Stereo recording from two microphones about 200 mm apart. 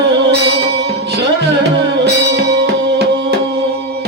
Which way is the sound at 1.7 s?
60° right (ahead or behind).